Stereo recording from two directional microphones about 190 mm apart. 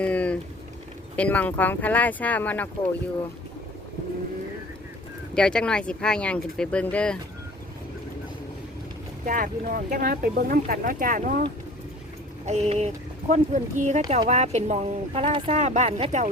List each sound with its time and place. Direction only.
0.0 s vehicle: 5° left (ahead or behind)
1.1 s speech: 10° left (ahead or behind)
5.3 s speech: 5° left (ahead or behind)
9.2 s speech: 45° right (ahead or behind)
12.5 s speech: 35° right (ahead or behind)